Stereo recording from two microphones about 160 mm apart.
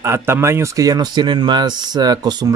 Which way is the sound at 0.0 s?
15° right (ahead or behind).